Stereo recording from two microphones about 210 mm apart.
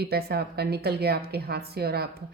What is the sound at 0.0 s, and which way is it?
Speech, 50° right (ahead or behind).